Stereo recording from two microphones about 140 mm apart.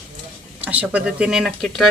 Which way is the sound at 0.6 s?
10° right (ahead or behind).